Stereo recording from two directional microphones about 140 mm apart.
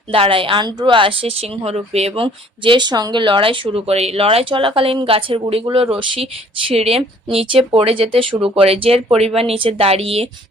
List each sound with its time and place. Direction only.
0.1 s speech: 40° right (ahead or behind)